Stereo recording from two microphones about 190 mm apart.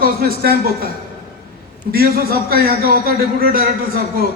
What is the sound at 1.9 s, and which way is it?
A man's voice, 55° right (ahead or behind).